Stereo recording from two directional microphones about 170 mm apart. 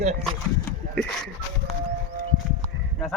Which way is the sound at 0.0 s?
40° right (ahead or behind).